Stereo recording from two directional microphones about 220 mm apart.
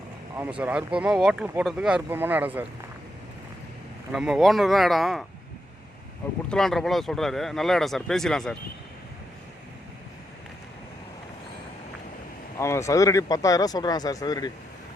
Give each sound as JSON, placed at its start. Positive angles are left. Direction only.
{"t": 0.3, "sound": "speech", "side_deg": -10}
{"t": 4.1, "sound": "speech", "side_deg": 0}
{"t": 6.5, "sound": "speech", "side_deg": 0}
{"t": 12.5, "sound": "speech", "side_deg": 10}